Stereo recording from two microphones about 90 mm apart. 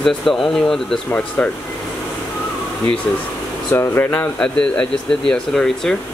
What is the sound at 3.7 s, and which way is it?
Speech, 25° left (ahead or behind).